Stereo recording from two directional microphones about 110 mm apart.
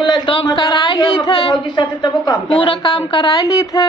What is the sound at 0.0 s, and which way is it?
A man's voice, 45° left (ahead or behind).